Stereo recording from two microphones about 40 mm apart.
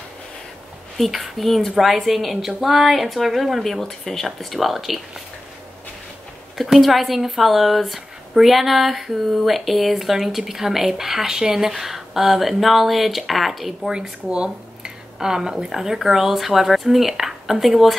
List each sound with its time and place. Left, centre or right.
0.9 s speech: centre
4.0 s speech: centre
6.6 s speech: centre
13.8 s speech: centre
14.3 s speech: right
15.1 s speech: centre